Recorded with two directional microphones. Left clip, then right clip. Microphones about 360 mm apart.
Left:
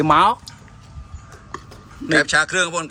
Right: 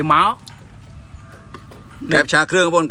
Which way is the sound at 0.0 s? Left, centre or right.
Left.